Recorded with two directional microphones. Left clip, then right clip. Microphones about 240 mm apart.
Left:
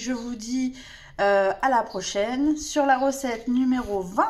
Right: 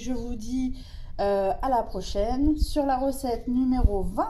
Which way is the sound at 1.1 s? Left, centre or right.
Left.